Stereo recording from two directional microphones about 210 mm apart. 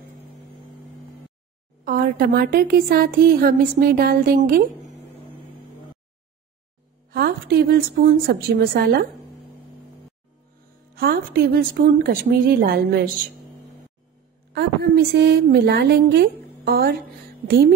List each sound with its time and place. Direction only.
1.9 s a woman's voice: 45° right (ahead or behind)
7.1 s a woman's voice: 50° right (ahead or behind)
11.0 s a woman's voice: 45° right (ahead or behind)
14.5 s a woman's voice: 50° right (ahead or behind)